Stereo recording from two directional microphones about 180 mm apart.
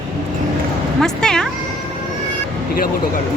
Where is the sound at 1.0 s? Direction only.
5° left (ahead or behind).